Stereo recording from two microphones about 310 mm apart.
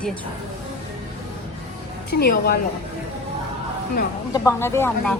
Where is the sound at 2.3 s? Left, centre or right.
Left.